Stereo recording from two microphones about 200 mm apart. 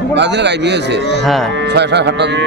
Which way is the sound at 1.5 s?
60° right (ahead or behind).